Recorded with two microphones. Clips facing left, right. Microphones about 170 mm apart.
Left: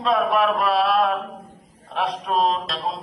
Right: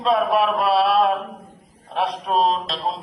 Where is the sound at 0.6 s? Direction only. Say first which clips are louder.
Right 2 dB; 30° right (ahead or behind).